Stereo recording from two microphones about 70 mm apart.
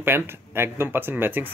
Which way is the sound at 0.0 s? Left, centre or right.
Right.